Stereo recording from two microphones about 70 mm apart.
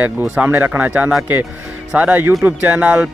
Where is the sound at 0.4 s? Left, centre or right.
Right.